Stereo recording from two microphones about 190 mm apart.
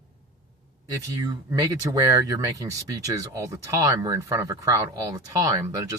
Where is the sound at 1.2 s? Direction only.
15° right (ahead or behind).